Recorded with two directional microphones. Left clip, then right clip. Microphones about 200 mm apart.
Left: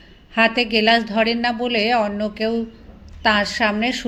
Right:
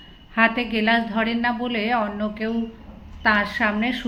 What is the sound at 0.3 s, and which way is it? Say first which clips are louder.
A woman's voice: left 3 dB; 40° left (ahead or behind).